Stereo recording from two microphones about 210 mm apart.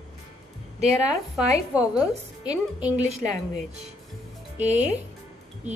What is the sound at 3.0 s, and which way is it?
A woman's voice, 30° right (ahead or behind).